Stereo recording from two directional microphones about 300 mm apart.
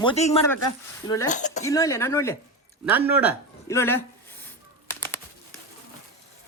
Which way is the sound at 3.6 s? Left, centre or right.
Centre.